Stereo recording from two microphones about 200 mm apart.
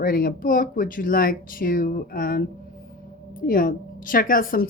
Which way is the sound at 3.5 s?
45° left (ahead or behind).